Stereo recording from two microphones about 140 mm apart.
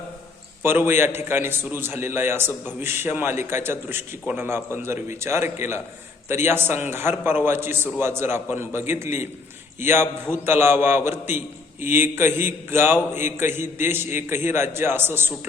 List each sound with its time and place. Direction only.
0.6 s a man's voice: 15° right (ahead or behind)